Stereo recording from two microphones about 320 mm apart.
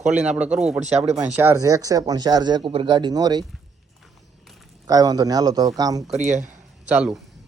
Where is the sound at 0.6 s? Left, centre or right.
Centre.